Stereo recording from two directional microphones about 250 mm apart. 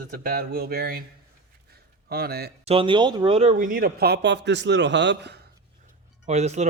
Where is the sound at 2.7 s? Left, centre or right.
Right.